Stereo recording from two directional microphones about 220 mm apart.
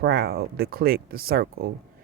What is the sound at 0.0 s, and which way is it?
Speech, 45° right (ahead or behind).